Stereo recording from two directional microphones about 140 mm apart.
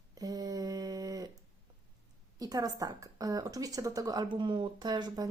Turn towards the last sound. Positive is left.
turn(degrees=-30)  # may be behind; listen again after turning